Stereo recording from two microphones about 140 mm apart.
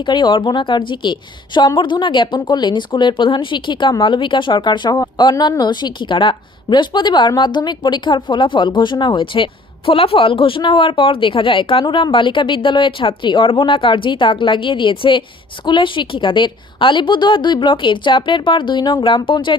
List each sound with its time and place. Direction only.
0.0 s a woman's voice: 35° left (ahead or behind)